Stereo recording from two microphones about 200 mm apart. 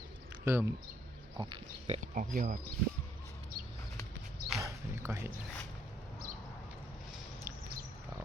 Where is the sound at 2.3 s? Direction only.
40° right (ahead or behind).